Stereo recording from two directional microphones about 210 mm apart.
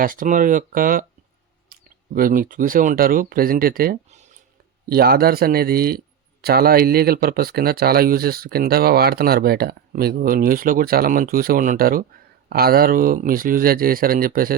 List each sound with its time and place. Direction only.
0.0 s speech: 40° right (ahead or behind)
4.9 s speech: 45° right (ahead or behind)